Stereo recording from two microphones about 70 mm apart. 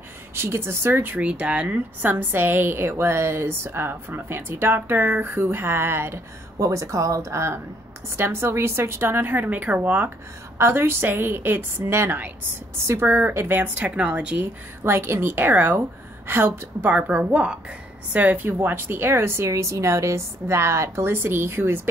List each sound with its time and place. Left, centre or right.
0.3 s a woman's voice: right
1.2 s a woman's voice: centre; by 6.2 s right
6.6 s a woman's voice: right
10.6 s a woman's voice: right
13.8 s a woman's voice: centre
14.8 s a woman's voice: right